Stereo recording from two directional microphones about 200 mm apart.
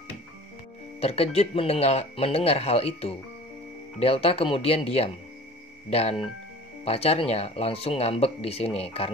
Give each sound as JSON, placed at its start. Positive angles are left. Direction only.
{"t": 1.0, "sound": "speech", "side_deg": 30}